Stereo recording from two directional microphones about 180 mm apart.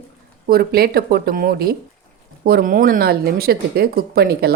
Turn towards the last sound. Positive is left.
turn(degrees=-60)  # may be behind; listen again after turning